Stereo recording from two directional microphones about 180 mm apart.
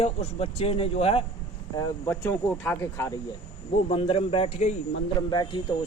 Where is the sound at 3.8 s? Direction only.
30° left (ahead or behind).